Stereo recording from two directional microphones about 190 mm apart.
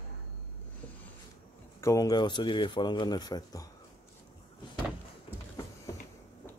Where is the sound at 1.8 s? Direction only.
15° left (ahead or behind).